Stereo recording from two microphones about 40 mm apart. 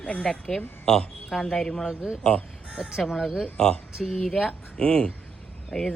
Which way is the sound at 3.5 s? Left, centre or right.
Centre.